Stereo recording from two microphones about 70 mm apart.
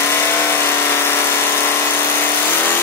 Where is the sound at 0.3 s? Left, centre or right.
Left.